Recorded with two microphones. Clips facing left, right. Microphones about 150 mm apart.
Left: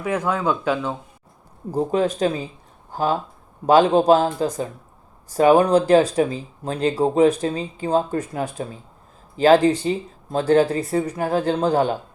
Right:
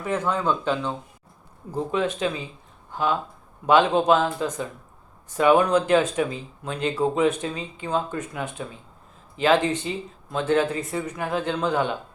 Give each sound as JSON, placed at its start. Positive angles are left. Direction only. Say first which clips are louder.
{"t": 0.0, "sound": "speech", "louder": "left 2 dB", "side_deg": 10}
{"t": 1.7, "sound": "speech", "louder": "left 5 dB", "side_deg": 40}